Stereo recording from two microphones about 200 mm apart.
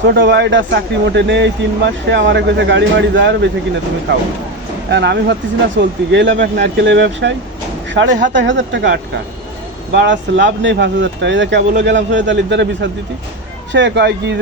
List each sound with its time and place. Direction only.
0.1 s speech: 60° right (ahead or behind)
4.9 s speech: 60° right (ahead or behind)